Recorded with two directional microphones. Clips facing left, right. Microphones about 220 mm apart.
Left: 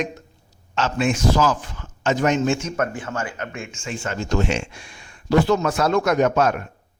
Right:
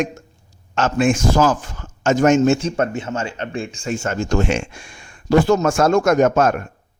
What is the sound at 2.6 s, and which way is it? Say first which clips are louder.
Speech: right 4 dB; 30° right (ahead or behind).